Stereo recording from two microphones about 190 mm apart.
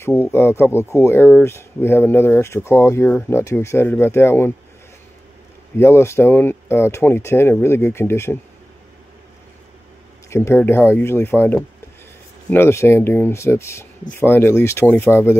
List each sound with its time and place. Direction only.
0.0 s speech: 15° left (ahead or behind)
5.8 s speech: 15° left (ahead or behind)
10.3 s speech: 15° left (ahead or behind)